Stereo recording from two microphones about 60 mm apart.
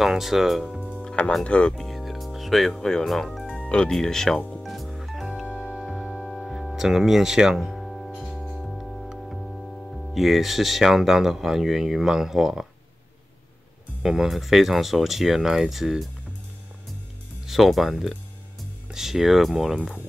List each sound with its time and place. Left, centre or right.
0.0 s speech: centre
1.0 s music: left
1.4 s speech: centre
1.8 s music: centre
2.8 s speech: centre
3.6 s speech: centre
4.6 s music: centre
9.2 s speech: centre
14.0 s speech: centre
17.5 s speech: centre